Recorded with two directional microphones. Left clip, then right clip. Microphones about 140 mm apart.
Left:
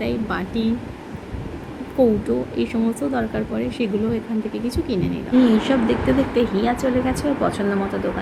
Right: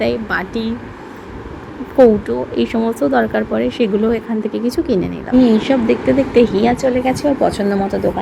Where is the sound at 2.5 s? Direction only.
20° right (ahead or behind).